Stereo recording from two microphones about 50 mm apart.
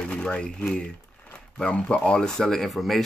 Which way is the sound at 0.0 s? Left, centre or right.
Centre.